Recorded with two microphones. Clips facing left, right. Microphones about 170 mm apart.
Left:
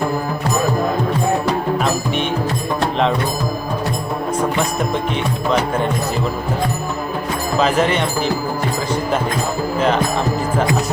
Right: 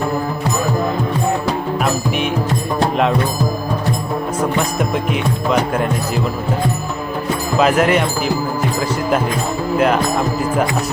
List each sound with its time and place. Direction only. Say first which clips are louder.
7.6 s speech: right 3 dB; 5° right (ahead or behind)
9.7 s speech: right 3 dB; 5° right (ahead or behind)